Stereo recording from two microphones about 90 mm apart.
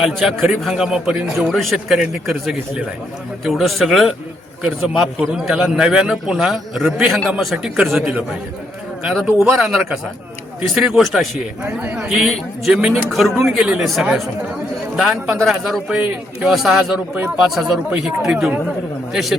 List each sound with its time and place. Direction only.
0.0 s a man's voice: 5° left (ahead or behind)
9.4 s a man's voice: 5° right (ahead or behind)
11.6 s a man's voice: 20° right (ahead or behind)
12.0 s a man's voice: 5° right (ahead or behind)